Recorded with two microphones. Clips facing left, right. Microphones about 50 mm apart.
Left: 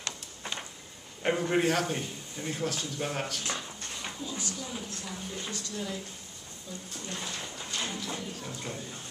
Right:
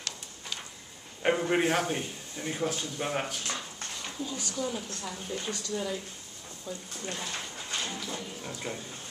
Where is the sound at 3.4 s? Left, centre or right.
Centre.